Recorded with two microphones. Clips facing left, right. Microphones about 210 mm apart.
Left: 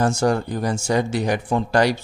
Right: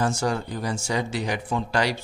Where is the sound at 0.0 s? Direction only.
45° left (ahead or behind).